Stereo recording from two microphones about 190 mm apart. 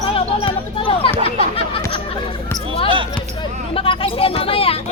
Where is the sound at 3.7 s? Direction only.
30° left (ahead or behind).